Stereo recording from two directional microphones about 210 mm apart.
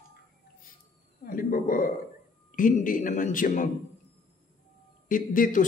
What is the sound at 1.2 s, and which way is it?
A man's voice, 40° left (ahead or behind).